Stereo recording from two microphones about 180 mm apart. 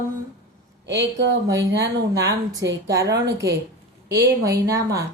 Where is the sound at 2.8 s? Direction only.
20° right (ahead or behind).